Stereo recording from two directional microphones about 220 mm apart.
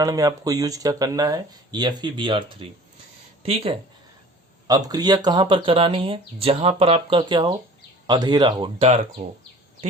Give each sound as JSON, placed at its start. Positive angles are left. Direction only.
{"t": 0.0, "sound": "speech", "side_deg": -15}